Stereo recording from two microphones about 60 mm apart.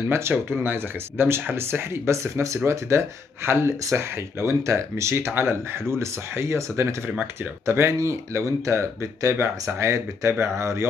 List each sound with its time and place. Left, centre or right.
0.1 s speech: right